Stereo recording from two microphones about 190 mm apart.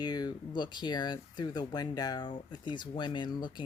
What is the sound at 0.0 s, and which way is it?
Speech, 20° left (ahead or behind).